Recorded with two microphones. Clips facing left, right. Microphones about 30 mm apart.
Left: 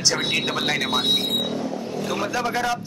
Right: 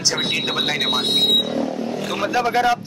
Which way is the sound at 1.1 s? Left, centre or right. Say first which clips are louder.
Right 7 dB; right.